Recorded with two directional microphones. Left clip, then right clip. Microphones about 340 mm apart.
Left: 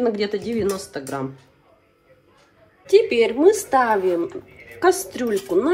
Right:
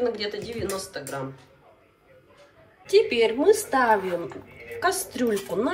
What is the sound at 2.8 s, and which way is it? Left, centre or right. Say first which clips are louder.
A woman's voice: left 4 dB; centre.